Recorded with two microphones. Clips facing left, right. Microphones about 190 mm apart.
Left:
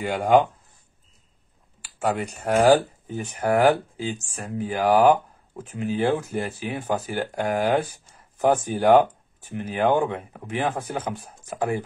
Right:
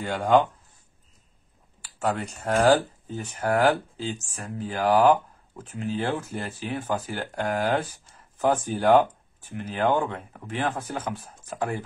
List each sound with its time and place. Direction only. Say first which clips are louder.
0.0 s speech: left 2 dB; 10° left (ahead or behind)
1.8 s speech: left 2 dB; 10° left (ahead or behind)